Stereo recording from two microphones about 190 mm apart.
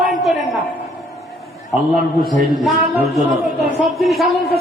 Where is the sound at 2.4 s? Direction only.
Centre (ahead or behind).